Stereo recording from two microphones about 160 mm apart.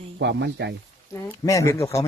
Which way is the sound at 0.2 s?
90° right.